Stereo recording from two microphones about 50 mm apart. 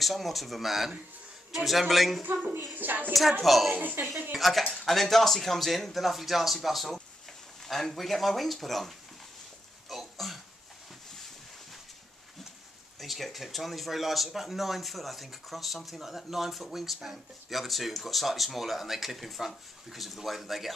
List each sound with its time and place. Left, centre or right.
0.0 s speech: centre
2.7 s a sound: right
3.1 s speech: centre
3.7 s speech: right
4.4 s speech: centre
9.8 s a sound: centre
13.0 s speech: centre